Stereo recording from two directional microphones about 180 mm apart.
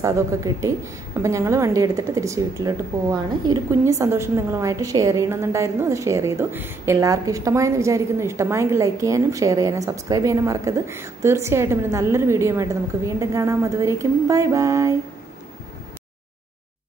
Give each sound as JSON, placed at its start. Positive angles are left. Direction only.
{"t": 0.0, "sound": "a woman's voice", "side_deg": -20}